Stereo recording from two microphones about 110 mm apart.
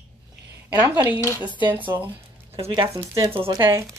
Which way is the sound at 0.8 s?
20° right (ahead or behind).